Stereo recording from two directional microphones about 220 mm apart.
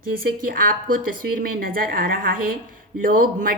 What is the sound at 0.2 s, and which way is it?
A woman's voice, 40° right (ahead or behind).